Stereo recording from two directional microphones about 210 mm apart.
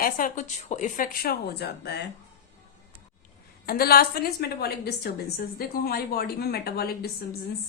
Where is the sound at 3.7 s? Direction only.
45° left (ahead or behind).